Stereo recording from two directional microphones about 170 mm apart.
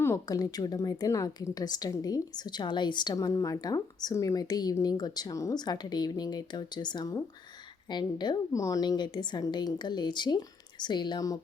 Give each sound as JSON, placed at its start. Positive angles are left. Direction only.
{"t": 0.0, "sound": "a woman's voice", "side_deg": 15}